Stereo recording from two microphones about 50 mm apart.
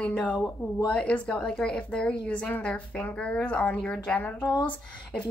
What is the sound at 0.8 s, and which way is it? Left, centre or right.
Speech, left.